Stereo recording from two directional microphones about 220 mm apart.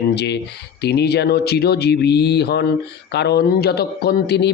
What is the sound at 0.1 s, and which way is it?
A man's voice, 50° left (ahead or behind).